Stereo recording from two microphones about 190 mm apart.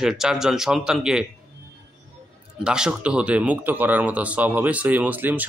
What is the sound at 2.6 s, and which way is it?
Speech, 5° right (ahead or behind).